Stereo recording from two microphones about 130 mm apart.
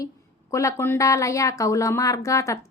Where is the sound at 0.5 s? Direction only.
20° left (ahead or behind).